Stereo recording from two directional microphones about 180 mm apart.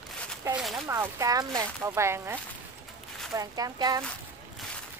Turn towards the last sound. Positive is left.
turn(degrees=-20)  # may be behind; listen again after turning